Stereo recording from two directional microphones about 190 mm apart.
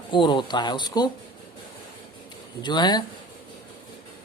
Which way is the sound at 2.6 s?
25° left (ahead or behind).